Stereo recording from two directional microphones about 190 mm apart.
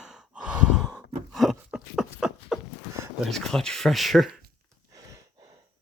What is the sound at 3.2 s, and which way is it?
Speech, centre (ahead or behind).